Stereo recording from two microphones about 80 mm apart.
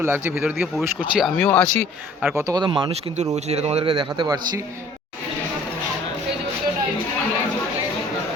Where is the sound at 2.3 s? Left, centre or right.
Right.